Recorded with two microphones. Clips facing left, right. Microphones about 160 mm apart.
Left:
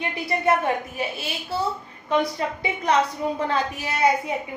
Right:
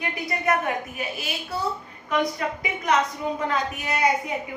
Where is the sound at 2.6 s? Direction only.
30° left (ahead or behind).